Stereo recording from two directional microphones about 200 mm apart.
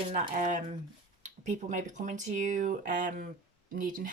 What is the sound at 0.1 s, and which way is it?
Speech, 35° right (ahead or behind).